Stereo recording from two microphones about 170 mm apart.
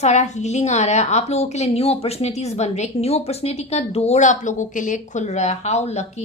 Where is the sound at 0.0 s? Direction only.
45° left (ahead or behind).